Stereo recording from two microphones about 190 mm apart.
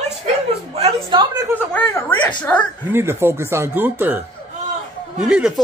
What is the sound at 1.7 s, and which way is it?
Speech, 10° left (ahead or behind).